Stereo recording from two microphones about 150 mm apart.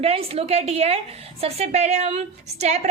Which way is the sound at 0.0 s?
40° right (ahead or behind).